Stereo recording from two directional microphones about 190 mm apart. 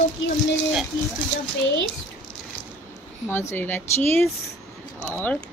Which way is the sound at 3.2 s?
10° left (ahead or behind).